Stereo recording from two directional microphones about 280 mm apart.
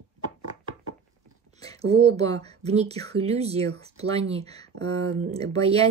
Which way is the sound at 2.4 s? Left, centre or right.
Right.